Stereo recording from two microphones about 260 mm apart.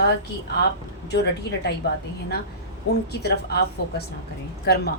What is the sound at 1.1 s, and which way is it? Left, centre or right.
Speech, left.